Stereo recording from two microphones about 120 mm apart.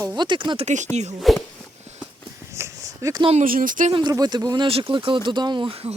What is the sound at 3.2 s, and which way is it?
Speech, 80° right.